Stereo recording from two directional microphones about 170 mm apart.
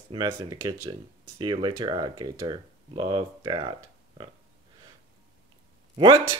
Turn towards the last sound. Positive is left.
turn(degrees=-25)  # may be behind; listen again after turning